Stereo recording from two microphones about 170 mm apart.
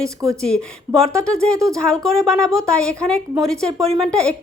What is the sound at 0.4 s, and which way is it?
A woman's voice, 5° left (ahead or behind).